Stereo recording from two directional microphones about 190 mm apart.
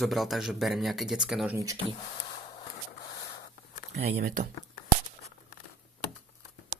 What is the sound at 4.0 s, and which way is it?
Speech, 45° right (ahead or behind).